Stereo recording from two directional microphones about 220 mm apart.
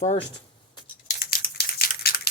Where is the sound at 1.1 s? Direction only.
40° left (ahead or behind).